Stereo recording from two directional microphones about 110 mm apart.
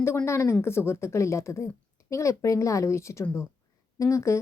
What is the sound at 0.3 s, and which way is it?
A woman's voice, 25° left (ahead or behind).